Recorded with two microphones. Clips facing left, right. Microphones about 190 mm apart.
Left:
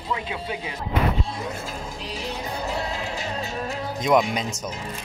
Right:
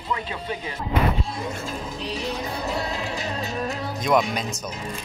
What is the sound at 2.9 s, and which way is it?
Music, 25° left (ahead or behind).